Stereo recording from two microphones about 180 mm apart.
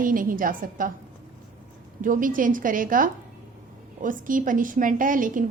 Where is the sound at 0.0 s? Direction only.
50° right (ahead or behind).